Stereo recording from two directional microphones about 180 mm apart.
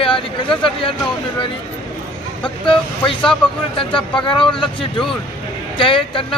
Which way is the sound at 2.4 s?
30° left (ahead or behind).